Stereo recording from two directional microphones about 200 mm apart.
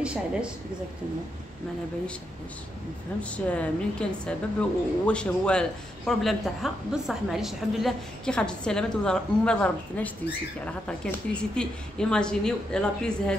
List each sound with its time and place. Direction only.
0.0 s a woman's voice: 5° right (ahead or behind)
3.2 s a woman's voice: 5° left (ahead or behind)